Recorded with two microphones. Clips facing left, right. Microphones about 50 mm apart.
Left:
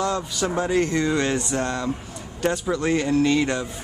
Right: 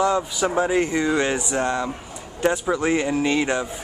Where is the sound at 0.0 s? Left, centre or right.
Centre.